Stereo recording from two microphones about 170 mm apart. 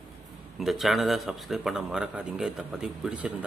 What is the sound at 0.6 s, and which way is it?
Speech, centre (ahead or behind).